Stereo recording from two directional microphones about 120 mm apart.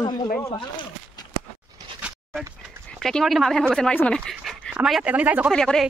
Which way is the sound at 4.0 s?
5° left (ahead or behind).